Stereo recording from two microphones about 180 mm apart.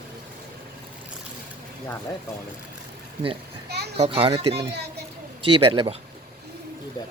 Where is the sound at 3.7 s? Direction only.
65° right (ahead or behind).